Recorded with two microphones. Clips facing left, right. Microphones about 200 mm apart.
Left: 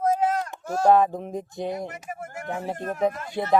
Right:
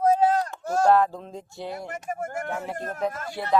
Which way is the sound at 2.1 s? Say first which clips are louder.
Right 5 dB; 45° right (ahead or behind).